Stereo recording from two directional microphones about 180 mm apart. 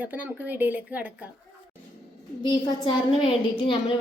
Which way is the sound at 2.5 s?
25° left (ahead or behind).